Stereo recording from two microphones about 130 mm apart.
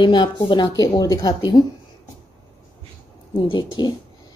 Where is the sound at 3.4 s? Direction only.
35° left (ahead or behind).